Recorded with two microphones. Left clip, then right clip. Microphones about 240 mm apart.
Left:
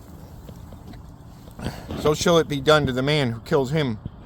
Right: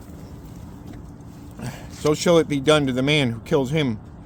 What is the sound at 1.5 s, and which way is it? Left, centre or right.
Speech, left.